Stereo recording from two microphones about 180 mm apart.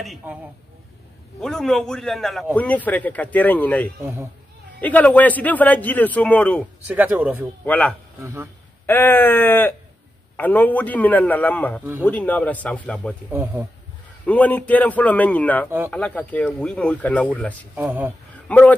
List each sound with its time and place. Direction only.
0.2 s speech: 10° right (ahead or behind)
1.4 s a man's voice: centre (ahead or behind)
6.9 s speech: 10° right (ahead or behind)
7.6 s a man's voice: 10° left (ahead or behind)
8.2 s speech: 15° right (ahead or behind)
8.8 s a man's voice: 10° left (ahead or behind)
13.3 s speech: 10° right (ahead or behind)
14.2 s a man's voice: 10° left (ahead or behind)
17.7 s speech: 10° right (ahead or behind)
18.5 s a man's voice: 10° left (ahead or behind)